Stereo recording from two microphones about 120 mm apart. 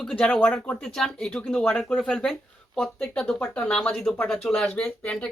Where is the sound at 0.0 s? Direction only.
5° left (ahead or behind).